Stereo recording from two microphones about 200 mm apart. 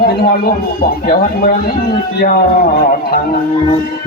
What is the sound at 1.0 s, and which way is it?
Speech, 50° left (ahead or behind).